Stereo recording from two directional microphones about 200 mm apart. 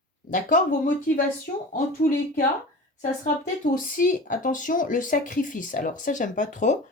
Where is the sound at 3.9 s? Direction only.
40° left (ahead or behind).